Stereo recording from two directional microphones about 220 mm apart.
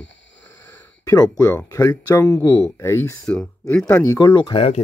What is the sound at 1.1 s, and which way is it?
Speech, 15° left (ahead or behind).